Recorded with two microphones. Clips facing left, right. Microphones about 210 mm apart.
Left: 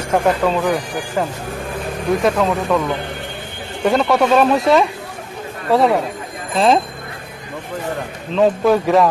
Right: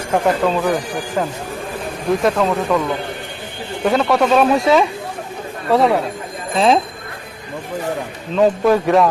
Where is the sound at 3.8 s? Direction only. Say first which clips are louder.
Even; centre (ahead or behind).